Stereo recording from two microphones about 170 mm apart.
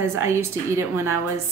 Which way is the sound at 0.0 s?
15° right (ahead or behind).